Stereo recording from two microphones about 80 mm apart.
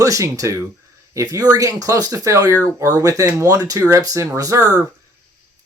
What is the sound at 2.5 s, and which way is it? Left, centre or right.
Speech, left.